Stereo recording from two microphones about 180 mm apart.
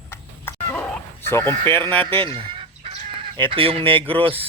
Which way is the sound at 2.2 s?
30° right (ahead or behind).